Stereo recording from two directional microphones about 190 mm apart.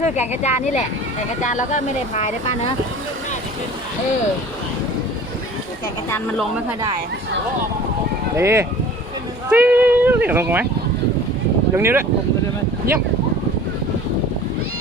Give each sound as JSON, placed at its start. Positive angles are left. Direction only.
{"t": 0.0, "sound": "speech", "side_deg": 35}
{"t": 6.1, "sound": "a woman's voice", "side_deg": 10}
{"t": 8.4, "sound": "speech", "side_deg": -15}
{"t": 11.8, "sound": "speech", "side_deg": -10}